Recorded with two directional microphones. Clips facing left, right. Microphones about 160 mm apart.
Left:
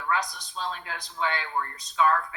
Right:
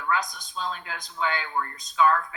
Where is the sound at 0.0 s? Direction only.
30° left (ahead or behind).